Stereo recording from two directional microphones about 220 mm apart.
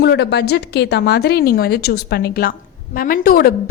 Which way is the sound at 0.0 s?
50° left (ahead or behind).